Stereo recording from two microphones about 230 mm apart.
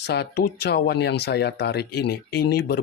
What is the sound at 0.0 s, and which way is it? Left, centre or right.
Speech, left.